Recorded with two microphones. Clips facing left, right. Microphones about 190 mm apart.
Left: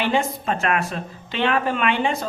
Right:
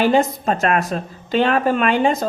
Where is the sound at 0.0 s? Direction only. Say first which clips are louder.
Right 6 dB; 40° right (ahead or behind).